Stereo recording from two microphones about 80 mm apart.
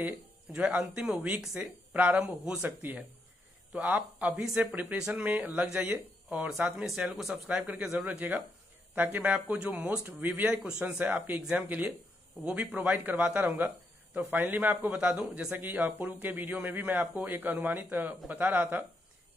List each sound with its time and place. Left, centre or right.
0.6 s a man's voice: centre
8.1 s a man's voice: right
10.0 s a man's voice: right
10.4 s a man's voice: centre